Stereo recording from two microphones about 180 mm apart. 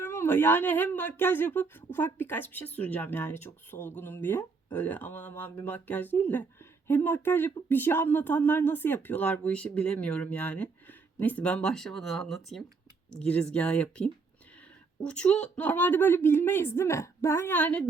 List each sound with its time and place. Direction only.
0.0 s speech: 15° left (ahead or behind)